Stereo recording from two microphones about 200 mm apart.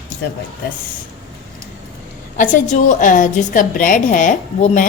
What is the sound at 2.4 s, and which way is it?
A woman's voice, 40° left (ahead or behind).